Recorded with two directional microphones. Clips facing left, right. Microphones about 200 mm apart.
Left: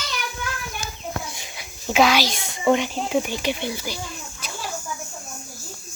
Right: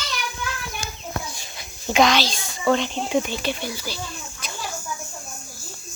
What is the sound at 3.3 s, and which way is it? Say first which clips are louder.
Speech: left 2 dB; 15° left (ahead or behind).